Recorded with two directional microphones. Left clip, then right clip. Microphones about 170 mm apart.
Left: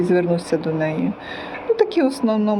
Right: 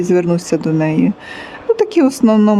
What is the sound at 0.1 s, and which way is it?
Speech, 45° right (ahead or behind).